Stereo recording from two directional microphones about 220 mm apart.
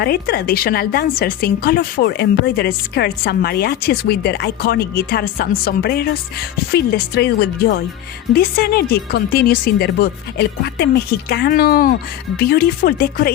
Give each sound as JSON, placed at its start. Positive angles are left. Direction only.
{"t": 0.0, "sound": "a woman's voice", "side_deg": 45}